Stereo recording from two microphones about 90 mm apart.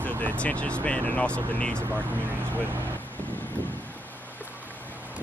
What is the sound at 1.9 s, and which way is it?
Speech, 20° right (ahead or behind).